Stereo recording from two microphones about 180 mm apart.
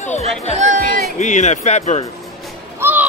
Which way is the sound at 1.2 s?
40° left (ahead or behind).